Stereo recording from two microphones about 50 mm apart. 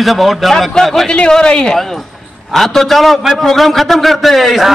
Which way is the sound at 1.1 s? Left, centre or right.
Centre.